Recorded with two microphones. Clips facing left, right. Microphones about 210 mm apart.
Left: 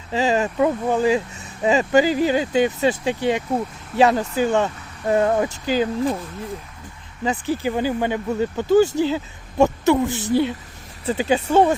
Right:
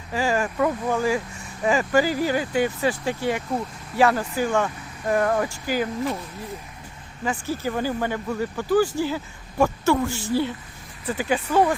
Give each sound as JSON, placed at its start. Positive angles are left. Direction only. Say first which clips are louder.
{"t": 0.1, "sound": "speech", "louder": "left 4 dB", "side_deg": 20}
{"t": 7.3, "sound": "speech", "louder": "left 4 dB", "side_deg": 15}